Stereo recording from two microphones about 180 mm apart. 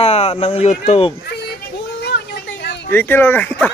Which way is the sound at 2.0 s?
65° left (ahead or behind).